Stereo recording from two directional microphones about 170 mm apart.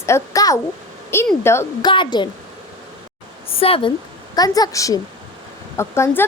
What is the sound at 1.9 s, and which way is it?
Speech, 25° left (ahead or behind).